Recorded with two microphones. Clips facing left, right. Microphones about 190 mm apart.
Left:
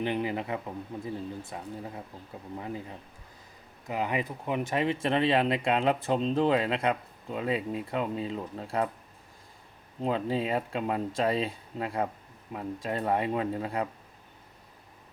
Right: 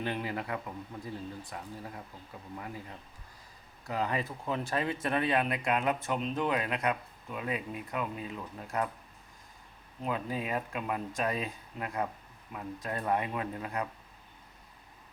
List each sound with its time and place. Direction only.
0.0 s speech: 20° left (ahead or behind)
3.8 s speech: 15° left (ahead or behind)
10.0 s speech: 30° left (ahead or behind)